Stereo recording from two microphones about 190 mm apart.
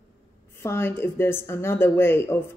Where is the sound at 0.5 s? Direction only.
15° left (ahead or behind).